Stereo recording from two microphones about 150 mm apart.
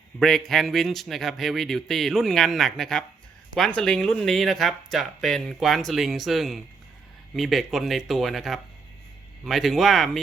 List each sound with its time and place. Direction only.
0.2 s speech: centre (ahead or behind)